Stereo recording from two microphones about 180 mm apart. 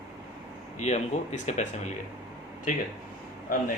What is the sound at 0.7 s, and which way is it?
A man's voice, 40° left (ahead or behind).